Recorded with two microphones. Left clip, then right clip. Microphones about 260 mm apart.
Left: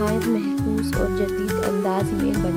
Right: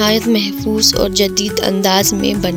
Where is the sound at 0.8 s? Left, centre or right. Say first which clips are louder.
Right 14 dB; right.